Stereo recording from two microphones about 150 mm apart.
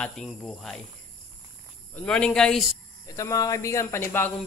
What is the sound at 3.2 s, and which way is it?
Speech, 25° left (ahead or behind).